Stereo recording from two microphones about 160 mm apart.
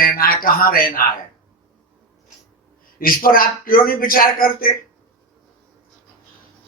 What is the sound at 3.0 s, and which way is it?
Speech, 65° left (ahead or behind).